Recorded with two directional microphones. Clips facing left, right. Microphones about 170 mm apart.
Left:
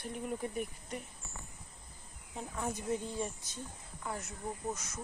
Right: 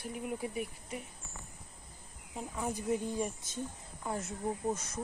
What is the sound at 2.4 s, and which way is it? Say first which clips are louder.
Speech: right 1 dB; 5° right (ahead or behind).